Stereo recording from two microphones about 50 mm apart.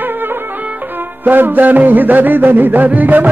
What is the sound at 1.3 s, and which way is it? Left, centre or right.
Music, right.